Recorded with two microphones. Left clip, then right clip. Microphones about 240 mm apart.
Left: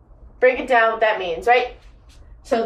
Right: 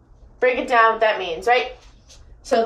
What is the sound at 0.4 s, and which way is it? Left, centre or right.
A woman's voice, centre.